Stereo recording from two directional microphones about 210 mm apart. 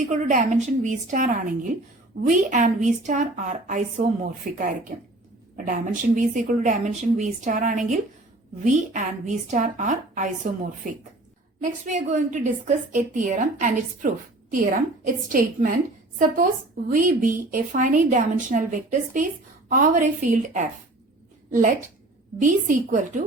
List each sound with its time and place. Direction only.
0.1 s a woman's voice: 35° right (ahead or behind)
11.6 s a woman's voice: 35° right (ahead or behind)
22.4 s a woman's voice: 40° right (ahead or behind)